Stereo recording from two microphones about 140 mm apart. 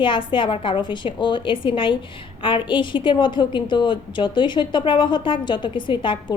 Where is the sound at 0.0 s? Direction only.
35° left (ahead or behind).